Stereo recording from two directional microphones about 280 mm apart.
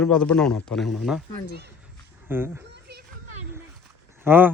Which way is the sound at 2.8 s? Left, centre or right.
Right.